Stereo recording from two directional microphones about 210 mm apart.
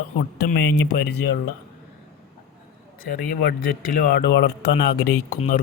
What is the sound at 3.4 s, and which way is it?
Speech, 45° left (ahead or behind).